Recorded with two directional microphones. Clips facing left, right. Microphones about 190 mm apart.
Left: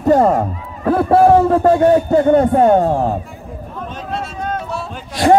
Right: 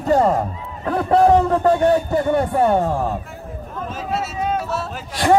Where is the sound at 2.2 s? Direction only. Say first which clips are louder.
Left 7 dB; 45° left (ahead or behind).